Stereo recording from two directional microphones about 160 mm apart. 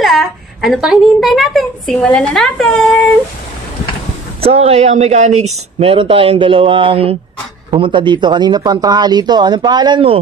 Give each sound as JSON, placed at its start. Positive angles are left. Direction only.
{"t": 0.0, "sound": "a woman's voice", "side_deg": 0}
{"t": 4.4, "sound": "speech", "side_deg": -40}